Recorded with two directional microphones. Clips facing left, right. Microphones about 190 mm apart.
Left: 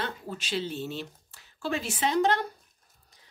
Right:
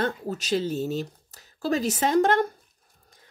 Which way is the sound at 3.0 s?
50° right (ahead or behind).